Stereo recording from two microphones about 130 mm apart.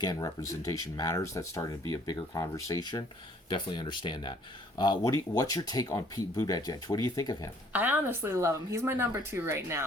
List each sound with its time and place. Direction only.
0.0 s speech: 30° left (ahead or behind)
7.7 s speech: 15° right (ahead or behind)